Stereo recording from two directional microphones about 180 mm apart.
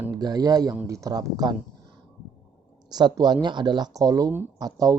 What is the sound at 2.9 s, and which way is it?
Speech, 20° right (ahead or behind).